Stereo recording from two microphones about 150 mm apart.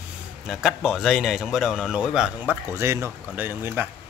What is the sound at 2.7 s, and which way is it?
Speech, 15° right (ahead or behind).